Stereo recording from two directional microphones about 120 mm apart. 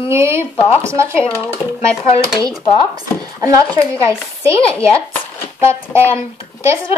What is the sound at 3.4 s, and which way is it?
Speech, 30° right (ahead or behind).